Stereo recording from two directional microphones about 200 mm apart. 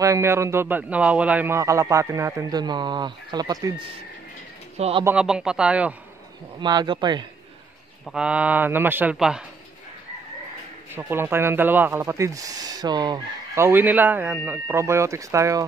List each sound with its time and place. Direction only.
0.0 s speech: 15° right (ahead or behind)
4.7 s speech: 30° right (ahead or behind)
5.0 s speech: 5° right (ahead or behind)
6.6 s speech: 20° right (ahead or behind)
8.0 s speech: 5° right (ahead or behind)
11.0 s speech: 10° right (ahead or behind)